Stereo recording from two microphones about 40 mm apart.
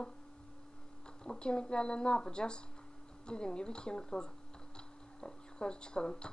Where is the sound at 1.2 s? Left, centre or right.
Left.